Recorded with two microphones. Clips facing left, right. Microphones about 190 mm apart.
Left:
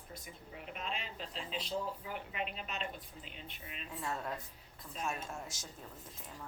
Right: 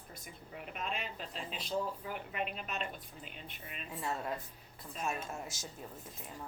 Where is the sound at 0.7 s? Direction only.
50° right (ahead or behind).